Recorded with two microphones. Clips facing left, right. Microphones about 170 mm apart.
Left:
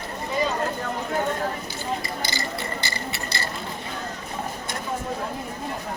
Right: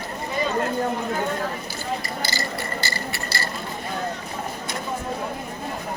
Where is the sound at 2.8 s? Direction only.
20° left (ahead or behind).